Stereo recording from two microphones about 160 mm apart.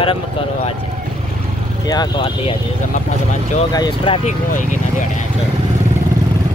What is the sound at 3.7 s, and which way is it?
Speech, 30° left (ahead or behind).